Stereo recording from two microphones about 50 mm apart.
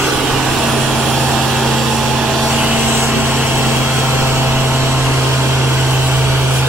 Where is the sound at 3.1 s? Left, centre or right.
Right.